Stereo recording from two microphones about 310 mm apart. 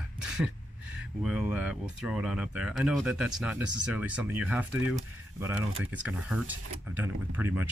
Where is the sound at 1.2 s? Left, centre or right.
Centre.